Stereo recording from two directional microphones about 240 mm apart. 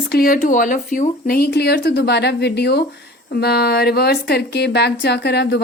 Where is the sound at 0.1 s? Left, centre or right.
Left.